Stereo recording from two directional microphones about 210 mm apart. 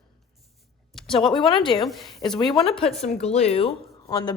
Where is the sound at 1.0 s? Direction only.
Centre (ahead or behind).